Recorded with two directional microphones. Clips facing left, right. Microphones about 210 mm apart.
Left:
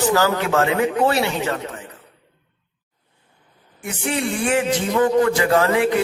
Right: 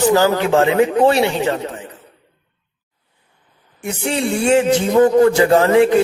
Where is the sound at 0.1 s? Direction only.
20° right (ahead or behind).